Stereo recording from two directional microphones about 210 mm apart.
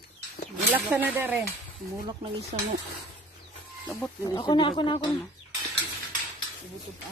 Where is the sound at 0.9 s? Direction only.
10° right (ahead or behind).